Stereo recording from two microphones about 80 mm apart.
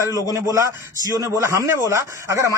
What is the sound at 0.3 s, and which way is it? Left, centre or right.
A man's voice, right.